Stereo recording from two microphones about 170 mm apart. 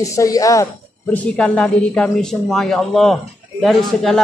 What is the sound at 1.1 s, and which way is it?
A man's voice, 10° left (ahead or behind).